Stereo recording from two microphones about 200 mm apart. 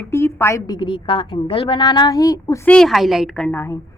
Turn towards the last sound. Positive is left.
turn(degrees=10)  # may be behind; listen again after turning